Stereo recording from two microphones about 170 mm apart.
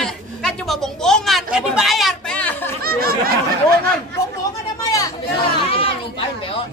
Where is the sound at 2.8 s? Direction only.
60° right (ahead or behind).